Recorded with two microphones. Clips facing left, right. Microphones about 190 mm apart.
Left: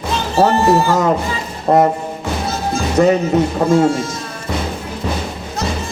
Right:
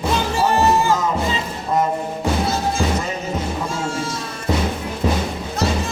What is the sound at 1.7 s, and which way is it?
Speech, 60° left (ahead or behind).